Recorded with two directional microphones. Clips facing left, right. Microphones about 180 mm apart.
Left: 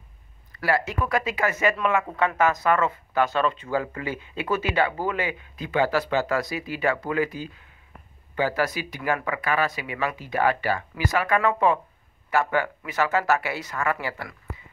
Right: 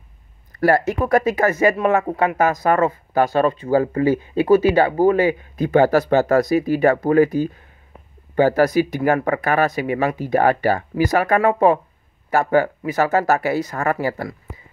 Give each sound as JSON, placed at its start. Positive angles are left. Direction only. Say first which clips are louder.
{"t": 0.5, "sound": "speech", "louder": "right 8 dB", "side_deg": -45}